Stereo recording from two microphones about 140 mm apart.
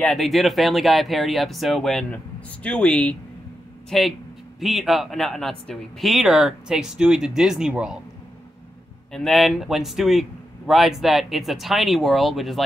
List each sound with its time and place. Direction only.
0.0 s speech: centre (ahead or behind)
9.1 s speech: centre (ahead or behind)